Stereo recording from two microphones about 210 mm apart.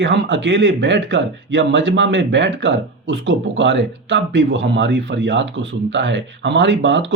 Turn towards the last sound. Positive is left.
turn(degrees=-60)  # may be behind; listen again after turning